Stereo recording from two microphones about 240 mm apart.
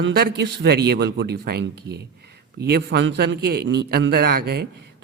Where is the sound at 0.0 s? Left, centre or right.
Right.